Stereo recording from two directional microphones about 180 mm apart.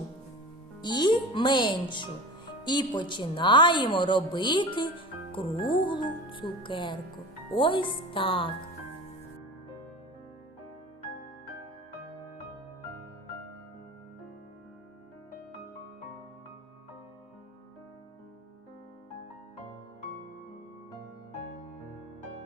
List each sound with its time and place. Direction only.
0.8 s speech: 25° left (ahead or behind)